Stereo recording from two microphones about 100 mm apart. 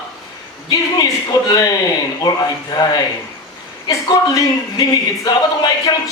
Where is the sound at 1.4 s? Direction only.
40° left (ahead or behind).